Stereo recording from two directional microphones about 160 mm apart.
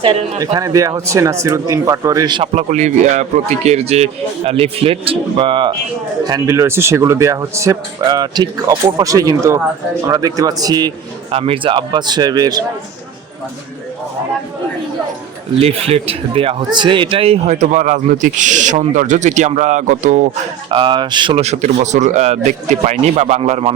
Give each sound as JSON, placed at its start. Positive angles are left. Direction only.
{"t": 0.0, "sound": "speech", "side_deg": -35}
{"t": 0.3, "sound": "speech", "side_deg": -20}
{"t": 2.4, "sound": "speech", "side_deg": -45}
{"t": 6.2, "sound": "speech", "side_deg": -25}
{"t": 11.3, "sound": "speech", "side_deg": -35}
{"t": 15.6, "sound": "speech", "side_deg": -40}
{"t": 20.7, "sound": "speech", "side_deg": -30}